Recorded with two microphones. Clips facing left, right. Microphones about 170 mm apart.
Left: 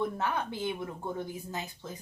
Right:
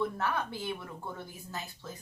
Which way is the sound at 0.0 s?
20° left (ahead or behind).